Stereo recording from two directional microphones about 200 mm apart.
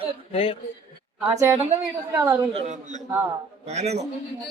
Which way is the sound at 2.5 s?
30° right (ahead or behind).